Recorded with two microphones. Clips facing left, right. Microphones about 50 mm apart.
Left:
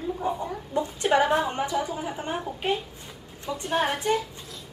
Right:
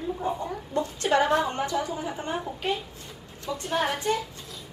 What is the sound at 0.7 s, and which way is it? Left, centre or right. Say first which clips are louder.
A woman's voice: left 1 dB; centre.